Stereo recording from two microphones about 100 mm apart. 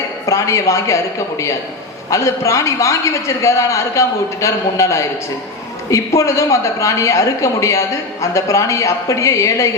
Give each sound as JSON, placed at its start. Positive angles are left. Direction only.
{"t": 0.3, "sound": "a man's voice", "side_deg": 30}
{"t": 2.0, "sound": "a man's voice", "side_deg": 30}